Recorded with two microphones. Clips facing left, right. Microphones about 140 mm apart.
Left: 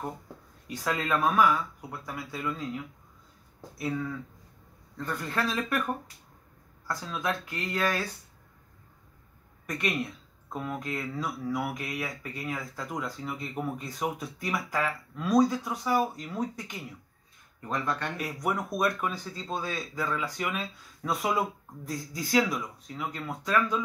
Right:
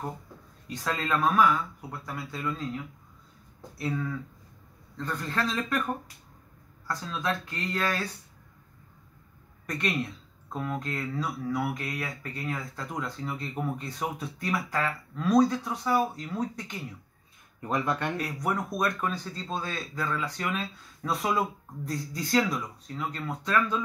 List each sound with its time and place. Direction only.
0.8 s speech: 10° left (ahead or behind)
7.1 s speech: 10° left (ahead or behind)
9.7 s speech: centre (ahead or behind)
17.6 s speech: 15° right (ahead or behind)
18.1 s speech: centre (ahead or behind)